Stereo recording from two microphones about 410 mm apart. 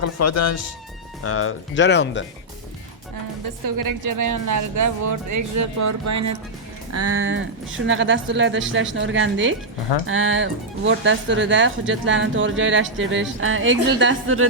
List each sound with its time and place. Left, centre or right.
0.0 s speech: left
3.8 s speech: right